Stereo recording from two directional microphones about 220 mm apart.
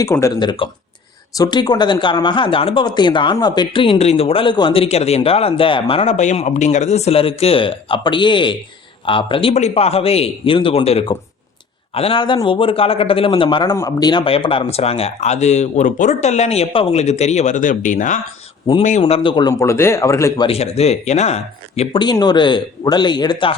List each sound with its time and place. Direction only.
0.0 s a man's voice: 15° left (ahead or behind)
20.5 s speech: 30° left (ahead or behind)